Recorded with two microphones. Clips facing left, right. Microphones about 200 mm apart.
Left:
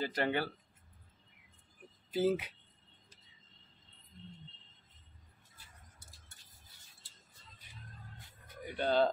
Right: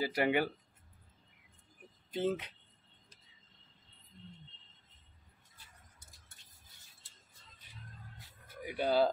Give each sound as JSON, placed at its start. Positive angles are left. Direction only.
{"t": 0.0, "sound": "speech", "side_deg": -10}
{"t": 2.0, "sound": "speech", "side_deg": 5}
{"t": 8.6, "sound": "speech", "side_deg": 0}